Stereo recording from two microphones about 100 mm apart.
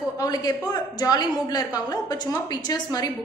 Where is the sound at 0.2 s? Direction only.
35° left (ahead or behind).